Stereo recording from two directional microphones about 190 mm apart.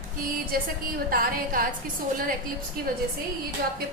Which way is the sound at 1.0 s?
50° right (ahead or behind).